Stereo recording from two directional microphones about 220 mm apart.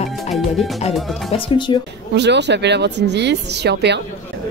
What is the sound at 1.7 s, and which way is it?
Speech, 20° left (ahead or behind).